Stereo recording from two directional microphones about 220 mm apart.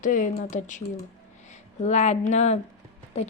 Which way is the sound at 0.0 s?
35° left (ahead or behind).